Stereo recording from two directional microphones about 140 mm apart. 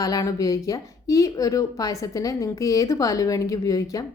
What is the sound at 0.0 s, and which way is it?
A woman's voice, 25° left (ahead or behind).